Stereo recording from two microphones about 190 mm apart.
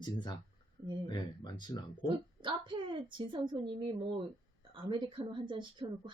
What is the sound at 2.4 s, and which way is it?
A woman's voice, 25° right (ahead or behind).